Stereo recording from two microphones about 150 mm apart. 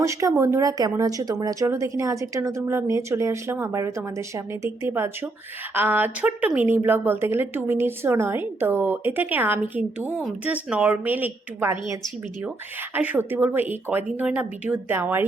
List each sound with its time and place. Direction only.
0.0 s speech: 20° right (ahead or behind)